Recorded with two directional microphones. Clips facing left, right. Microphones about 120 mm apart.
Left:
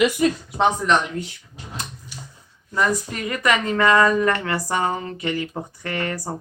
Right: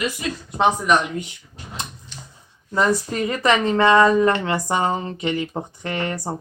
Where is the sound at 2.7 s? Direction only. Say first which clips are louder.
Right 3 dB; 25° right (ahead or behind).